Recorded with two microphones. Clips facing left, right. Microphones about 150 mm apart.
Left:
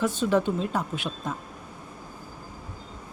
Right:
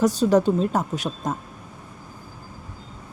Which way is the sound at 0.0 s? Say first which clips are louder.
Right 6 dB; 40° right (ahead or behind).